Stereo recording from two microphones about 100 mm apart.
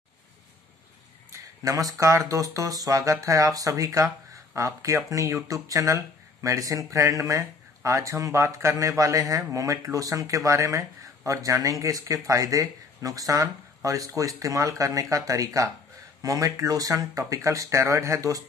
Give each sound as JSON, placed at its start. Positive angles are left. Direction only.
{"t": 1.3, "sound": "speech", "side_deg": -35}